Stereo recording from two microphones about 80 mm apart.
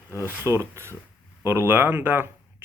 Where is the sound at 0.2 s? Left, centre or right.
Right.